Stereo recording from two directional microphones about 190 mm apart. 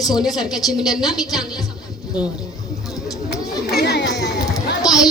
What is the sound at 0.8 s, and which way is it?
Speech, 20° left (ahead or behind).